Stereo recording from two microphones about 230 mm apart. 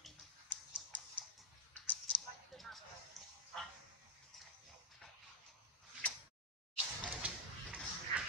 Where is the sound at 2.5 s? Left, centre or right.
Centre.